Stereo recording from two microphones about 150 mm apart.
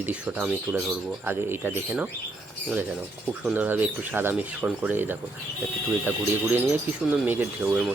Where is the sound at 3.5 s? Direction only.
10° right (ahead or behind).